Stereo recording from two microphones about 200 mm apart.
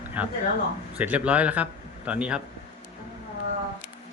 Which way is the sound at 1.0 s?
5° right (ahead or behind).